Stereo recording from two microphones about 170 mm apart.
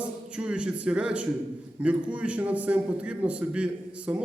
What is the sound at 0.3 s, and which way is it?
A man's voice, 5° right (ahead or behind).